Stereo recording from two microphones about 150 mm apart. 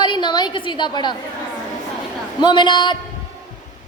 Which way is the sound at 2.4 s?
30° left (ahead or behind).